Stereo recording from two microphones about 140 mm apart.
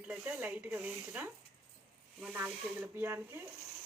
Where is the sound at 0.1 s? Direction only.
10° right (ahead or behind).